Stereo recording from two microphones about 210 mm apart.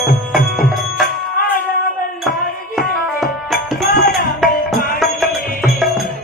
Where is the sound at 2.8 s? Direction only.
Centre (ahead or behind).